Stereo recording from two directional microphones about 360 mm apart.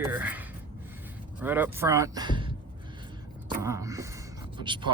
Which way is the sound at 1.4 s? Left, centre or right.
Centre.